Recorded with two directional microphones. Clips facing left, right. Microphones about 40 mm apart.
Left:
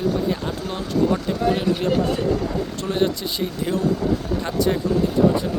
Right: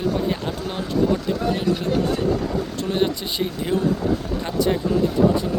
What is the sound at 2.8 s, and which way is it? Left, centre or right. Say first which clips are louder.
Speech: left 1 dB; centre.